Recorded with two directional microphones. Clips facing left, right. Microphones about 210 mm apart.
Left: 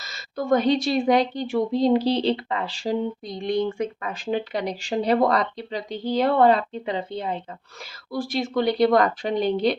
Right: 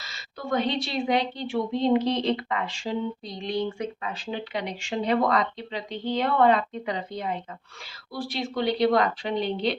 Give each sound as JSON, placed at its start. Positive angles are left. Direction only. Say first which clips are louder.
{"t": 0.0, "sound": "a woman's voice", "louder": "left 8 dB", "side_deg": 45}
{"t": 8.1, "sound": "speech", "louder": "left 5 dB", "side_deg": 45}